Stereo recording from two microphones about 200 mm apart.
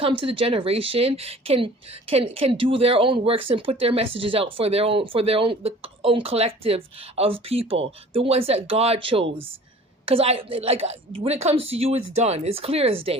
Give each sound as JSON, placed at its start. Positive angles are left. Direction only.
{"t": 0.0, "sound": "speech", "side_deg": -25}